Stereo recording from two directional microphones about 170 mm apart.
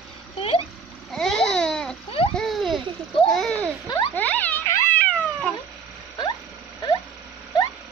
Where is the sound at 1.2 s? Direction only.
5° left (ahead or behind).